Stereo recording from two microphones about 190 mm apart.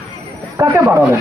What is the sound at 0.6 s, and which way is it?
Speech, 15° right (ahead or behind).